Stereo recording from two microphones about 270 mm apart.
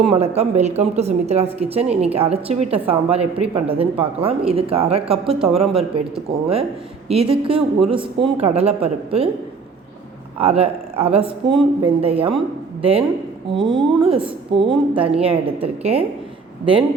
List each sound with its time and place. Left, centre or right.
0.0 s a woman's voice: right
10.3 s a woman's voice: right